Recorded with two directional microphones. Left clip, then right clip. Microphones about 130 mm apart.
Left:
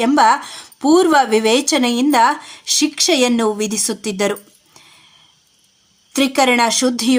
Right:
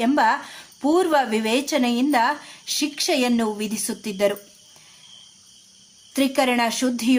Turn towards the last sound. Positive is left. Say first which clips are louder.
# left 6 dB
turn(degrees=40)  # may be behind; listen again after turning